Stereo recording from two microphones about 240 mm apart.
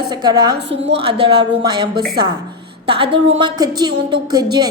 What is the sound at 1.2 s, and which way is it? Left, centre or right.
A woman's voice, centre.